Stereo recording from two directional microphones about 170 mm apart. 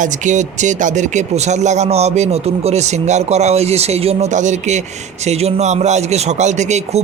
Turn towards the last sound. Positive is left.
turn(degrees=-45)  # may be behind; listen again after turning